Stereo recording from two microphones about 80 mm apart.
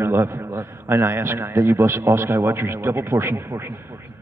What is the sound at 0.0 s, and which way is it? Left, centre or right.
Speech, right.